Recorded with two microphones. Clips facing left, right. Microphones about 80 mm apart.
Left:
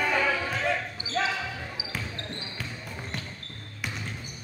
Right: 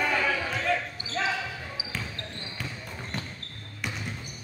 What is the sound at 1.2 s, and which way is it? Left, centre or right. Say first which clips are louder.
Basketball bounce: left 1 dB; centre.